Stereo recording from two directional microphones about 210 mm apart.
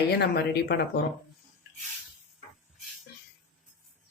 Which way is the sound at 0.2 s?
50° left (ahead or behind).